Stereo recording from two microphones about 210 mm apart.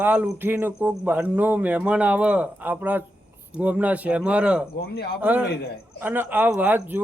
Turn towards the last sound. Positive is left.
turn(degrees=-10)  # may be behind; listen again after turning